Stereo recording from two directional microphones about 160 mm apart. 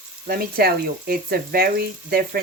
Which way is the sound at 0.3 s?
70° right (ahead or behind).